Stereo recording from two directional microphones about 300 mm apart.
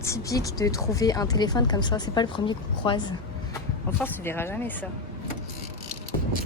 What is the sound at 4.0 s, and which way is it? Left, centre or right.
Speech, centre.